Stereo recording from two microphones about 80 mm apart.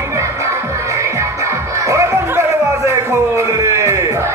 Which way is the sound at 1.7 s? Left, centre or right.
Right.